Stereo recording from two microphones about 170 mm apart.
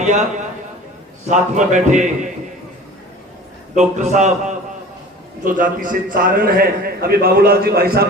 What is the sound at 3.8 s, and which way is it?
A man's voice, 45° right (ahead or behind).